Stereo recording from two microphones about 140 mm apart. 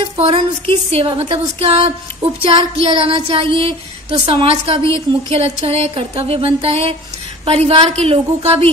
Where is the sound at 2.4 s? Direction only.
40° right (ahead or behind).